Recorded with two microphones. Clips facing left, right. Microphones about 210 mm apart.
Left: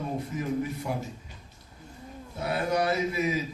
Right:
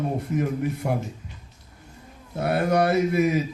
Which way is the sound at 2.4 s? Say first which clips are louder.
Right 6 dB; 60° right (ahead or behind).